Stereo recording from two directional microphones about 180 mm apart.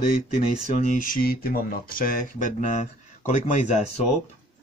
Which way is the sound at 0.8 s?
50° left (ahead or behind).